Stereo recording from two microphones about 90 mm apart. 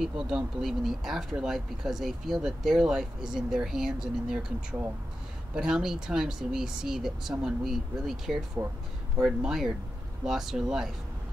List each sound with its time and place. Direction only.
0.0 s speech: 5° right (ahead or behind)
8.6 s speech: 30° right (ahead or behind)
9.2 s speech: 5° right (ahead or behind)